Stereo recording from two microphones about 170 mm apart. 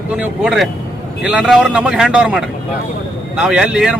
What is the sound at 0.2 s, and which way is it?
Speech, 5° right (ahead or behind).